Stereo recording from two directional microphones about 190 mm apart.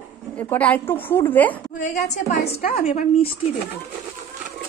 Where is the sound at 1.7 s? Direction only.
40° left (ahead or behind).